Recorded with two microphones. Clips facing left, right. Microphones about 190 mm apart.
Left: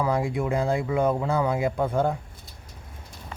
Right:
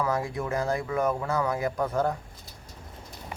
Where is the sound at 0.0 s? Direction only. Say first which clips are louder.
Left 3 dB; 15° left (ahead or behind).